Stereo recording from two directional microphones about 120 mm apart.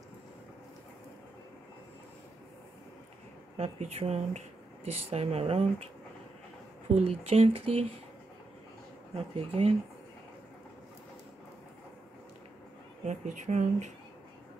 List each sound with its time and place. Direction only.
3.5 s speech: 65° right (ahead or behind)
7.0 s speech: 60° right (ahead or behind)
9.1 s speech: 55° right (ahead or behind)
13.0 s speech: 80° right